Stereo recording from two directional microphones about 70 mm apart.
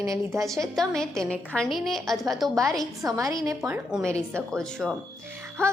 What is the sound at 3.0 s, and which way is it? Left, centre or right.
Speech, right.